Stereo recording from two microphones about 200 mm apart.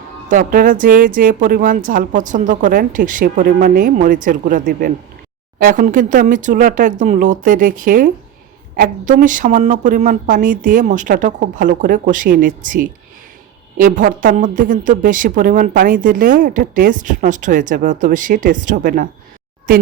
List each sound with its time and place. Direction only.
0.3 s a woman's voice: 40° right (ahead or behind)